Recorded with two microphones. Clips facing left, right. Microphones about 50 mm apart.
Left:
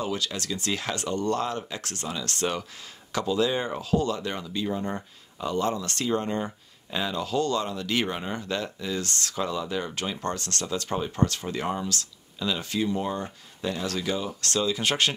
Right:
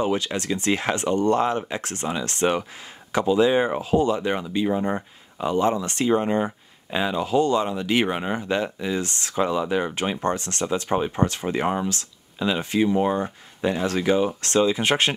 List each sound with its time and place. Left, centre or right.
0.0 s speech: right